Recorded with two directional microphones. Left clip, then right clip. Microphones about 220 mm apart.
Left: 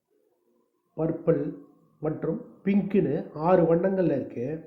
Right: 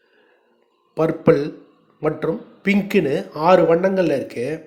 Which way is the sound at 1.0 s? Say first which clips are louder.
Right 9 dB; 25° right (ahead or behind).